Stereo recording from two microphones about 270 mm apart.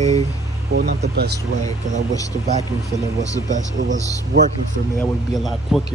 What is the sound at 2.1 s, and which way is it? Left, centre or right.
Speech, centre.